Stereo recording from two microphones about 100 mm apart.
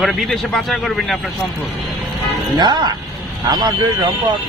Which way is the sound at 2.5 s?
45° right (ahead or behind).